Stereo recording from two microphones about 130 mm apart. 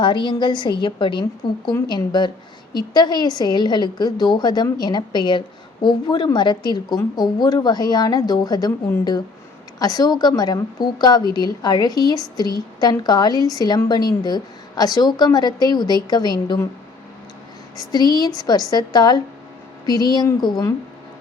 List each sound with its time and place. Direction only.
0.0 s a woman's voice: 35° left (ahead or behind)
9.7 s a woman's voice: 30° left (ahead or behind)
17.9 s a woman's voice: 30° left (ahead or behind)